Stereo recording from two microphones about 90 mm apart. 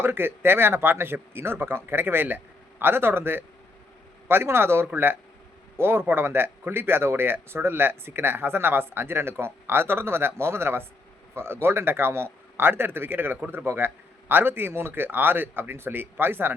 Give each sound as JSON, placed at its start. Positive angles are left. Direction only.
{"t": 0.0, "sound": "a man's voice", "side_deg": -25}